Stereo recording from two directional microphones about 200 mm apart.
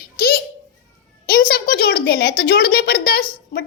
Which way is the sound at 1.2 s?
50° left (ahead or behind).